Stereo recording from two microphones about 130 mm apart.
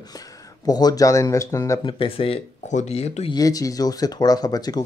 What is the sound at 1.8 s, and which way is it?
Speech, 40° left (ahead or behind).